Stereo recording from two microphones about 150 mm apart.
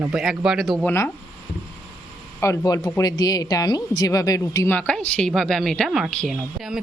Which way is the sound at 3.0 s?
25° left (ahead or behind).